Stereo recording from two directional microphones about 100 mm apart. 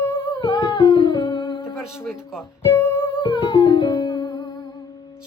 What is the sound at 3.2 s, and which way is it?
Music, 60° left (ahead or behind).